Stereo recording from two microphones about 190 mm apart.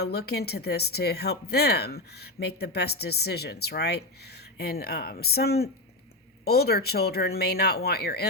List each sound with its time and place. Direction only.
0.0 s speech: 55° left (ahead or behind)